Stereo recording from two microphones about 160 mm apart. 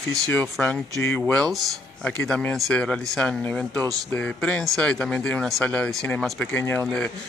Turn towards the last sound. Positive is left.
turn(degrees=5)  # may be behind; listen again after turning